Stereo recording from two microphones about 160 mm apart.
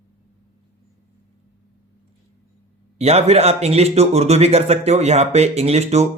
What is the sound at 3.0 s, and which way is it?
A man's voice, 40° right (ahead or behind).